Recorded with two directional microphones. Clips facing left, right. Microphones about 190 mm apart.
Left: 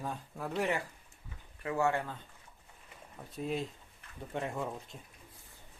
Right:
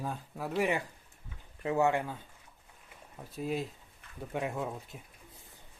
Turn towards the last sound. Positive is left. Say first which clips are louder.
# right 2 dB
turn(degrees=-5)  # may be behind; listen again after turning